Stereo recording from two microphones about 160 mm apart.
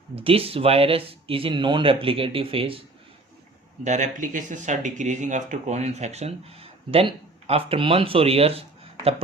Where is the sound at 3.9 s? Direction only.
50° right (ahead or behind).